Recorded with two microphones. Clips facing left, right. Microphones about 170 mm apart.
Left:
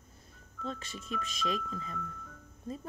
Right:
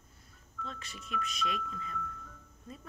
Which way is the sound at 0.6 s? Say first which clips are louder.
Left 5 dB; 35° left (ahead or behind).